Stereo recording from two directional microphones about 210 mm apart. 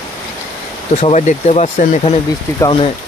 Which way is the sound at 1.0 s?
35° left (ahead or behind).